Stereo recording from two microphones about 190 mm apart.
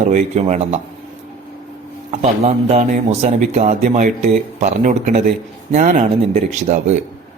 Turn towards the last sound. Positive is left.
turn(degrees=-40)  # may be behind; listen again after turning